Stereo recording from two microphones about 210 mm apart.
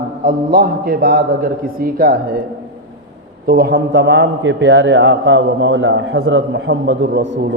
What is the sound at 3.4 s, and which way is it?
A man's voice, 50° right (ahead or behind).